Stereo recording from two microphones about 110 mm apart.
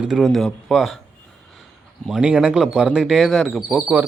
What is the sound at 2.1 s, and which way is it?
Speech, 10° right (ahead or behind).